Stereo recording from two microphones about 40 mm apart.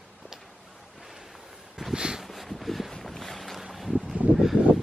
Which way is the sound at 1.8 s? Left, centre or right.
Centre.